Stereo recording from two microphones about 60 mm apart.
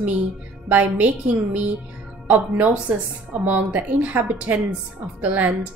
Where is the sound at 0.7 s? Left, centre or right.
Right.